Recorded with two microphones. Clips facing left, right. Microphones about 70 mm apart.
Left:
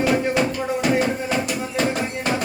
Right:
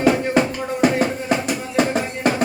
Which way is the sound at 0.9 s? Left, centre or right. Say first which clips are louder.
Right 1 dB; centre.